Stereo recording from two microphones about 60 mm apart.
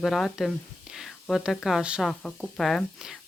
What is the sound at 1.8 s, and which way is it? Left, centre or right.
Speech, centre.